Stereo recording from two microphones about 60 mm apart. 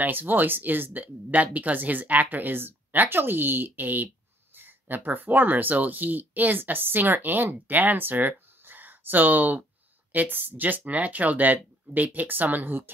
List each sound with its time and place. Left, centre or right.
0.0 s speech: right